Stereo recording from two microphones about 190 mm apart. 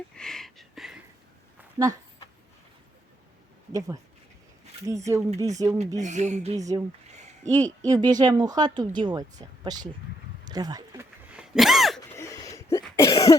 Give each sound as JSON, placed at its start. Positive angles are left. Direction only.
{"t": 0.1, "sound": "a sound", "side_deg": 5}
{"t": 3.7, "sound": "speech", "side_deg": -15}
{"t": 6.0, "sound": "speech", "side_deg": -40}
{"t": 6.6, "sound": "speech", "side_deg": -20}
{"t": 7.4, "sound": "speech", "side_deg": 10}
{"t": 7.8, "sound": "a woman's voice", "side_deg": -20}
{"t": 11.3, "sound": "a sound", "side_deg": -5}
{"t": 12.1, "sound": "a sound", "side_deg": 15}
{"t": 12.7, "sound": "cough", "side_deg": 15}